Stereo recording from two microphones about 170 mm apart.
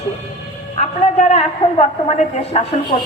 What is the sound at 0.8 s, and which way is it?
A woman's voice, 40° left (ahead or behind).